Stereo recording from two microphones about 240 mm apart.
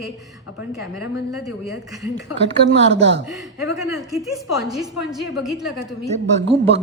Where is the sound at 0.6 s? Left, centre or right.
Centre.